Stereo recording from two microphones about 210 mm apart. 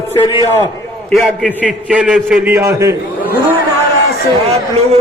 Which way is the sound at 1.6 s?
5° right (ahead or behind).